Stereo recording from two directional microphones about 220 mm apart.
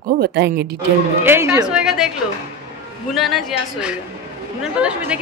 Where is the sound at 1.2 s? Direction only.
10° right (ahead or behind).